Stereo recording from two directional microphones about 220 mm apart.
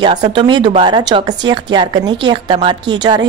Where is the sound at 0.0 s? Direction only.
20° right (ahead or behind).